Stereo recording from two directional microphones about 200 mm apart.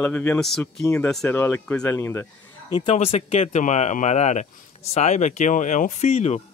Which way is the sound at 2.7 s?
25° left (ahead or behind).